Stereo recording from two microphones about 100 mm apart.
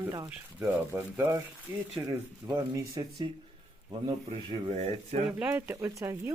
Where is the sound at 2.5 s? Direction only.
35° right (ahead or behind).